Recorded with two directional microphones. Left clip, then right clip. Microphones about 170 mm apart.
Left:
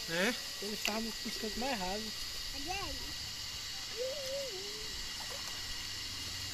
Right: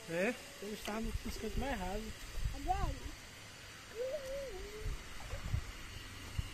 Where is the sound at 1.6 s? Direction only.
25° left (ahead or behind).